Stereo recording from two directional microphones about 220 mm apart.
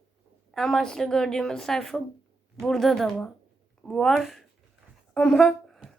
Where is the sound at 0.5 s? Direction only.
Centre (ahead or behind).